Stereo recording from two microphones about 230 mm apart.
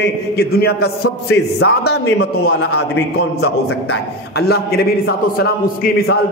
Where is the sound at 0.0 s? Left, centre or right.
Left.